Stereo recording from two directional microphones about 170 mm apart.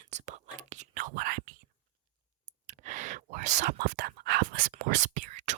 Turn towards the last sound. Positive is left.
turn(degrees=-45)  # may be behind; listen again after turning